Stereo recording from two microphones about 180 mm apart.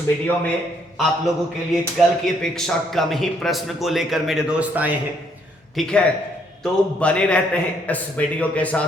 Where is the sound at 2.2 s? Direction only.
Centre (ahead or behind).